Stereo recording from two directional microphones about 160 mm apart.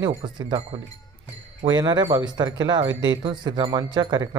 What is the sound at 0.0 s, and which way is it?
Speech, 25° right (ahead or behind).